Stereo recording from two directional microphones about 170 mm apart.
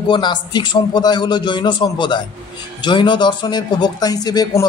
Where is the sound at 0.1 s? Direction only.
25° left (ahead or behind).